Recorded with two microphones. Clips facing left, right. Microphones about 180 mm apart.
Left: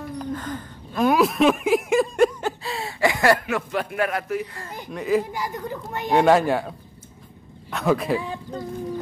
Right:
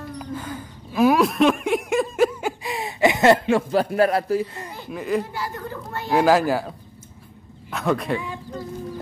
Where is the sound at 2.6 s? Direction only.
15° right (ahead or behind).